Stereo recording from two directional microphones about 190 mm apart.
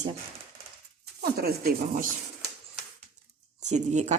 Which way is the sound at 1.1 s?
55° right (ahead or behind).